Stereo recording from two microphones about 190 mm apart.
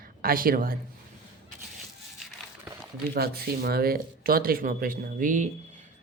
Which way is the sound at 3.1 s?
55° right (ahead or behind).